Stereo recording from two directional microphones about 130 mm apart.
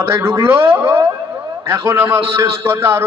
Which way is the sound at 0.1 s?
20° right (ahead or behind).